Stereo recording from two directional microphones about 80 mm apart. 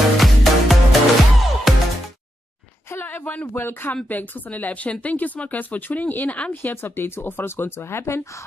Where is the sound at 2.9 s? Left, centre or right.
Left.